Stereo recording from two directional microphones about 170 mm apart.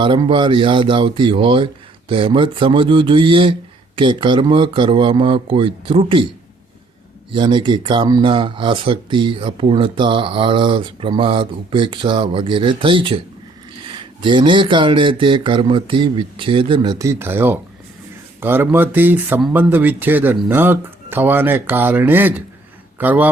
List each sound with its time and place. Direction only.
0.0 s speech: 30° right (ahead or behind)
7.3 s speech: 30° right (ahead or behind); by 23.3 s 10° right (ahead or behind)